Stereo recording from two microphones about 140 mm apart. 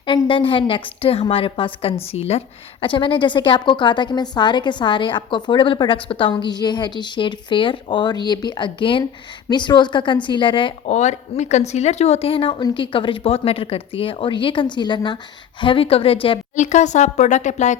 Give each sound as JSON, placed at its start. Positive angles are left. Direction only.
{"t": 0.0, "sound": "a woman's voice", "side_deg": 35}
{"t": 2.8, "sound": "a woman's voice", "side_deg": 35}
{"t": 10.8, "sound": "a woman's voice", "side_deg": 55}
{"t": 16.6, "sound": "a woman's voice", "side_deg": 60}